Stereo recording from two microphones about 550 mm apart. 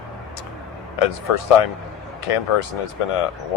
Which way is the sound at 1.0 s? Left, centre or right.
Left.